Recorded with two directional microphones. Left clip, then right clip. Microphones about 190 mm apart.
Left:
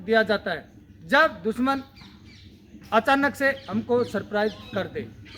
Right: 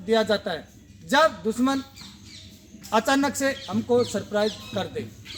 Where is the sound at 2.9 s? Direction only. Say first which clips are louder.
Left 1 dB; 25° left (ahead or behind).